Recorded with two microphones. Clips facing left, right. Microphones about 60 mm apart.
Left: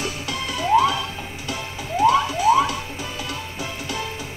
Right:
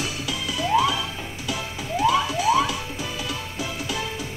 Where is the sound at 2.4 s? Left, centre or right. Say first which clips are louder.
Left 4 dB; left.